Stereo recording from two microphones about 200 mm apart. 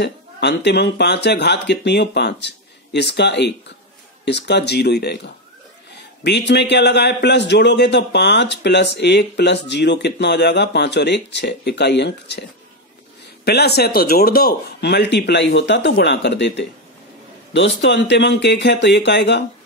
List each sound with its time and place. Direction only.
0.0 s a man's voice: 55° left (ahead or behind)
13.5 s a man's voice: 55° left (ahead or behind)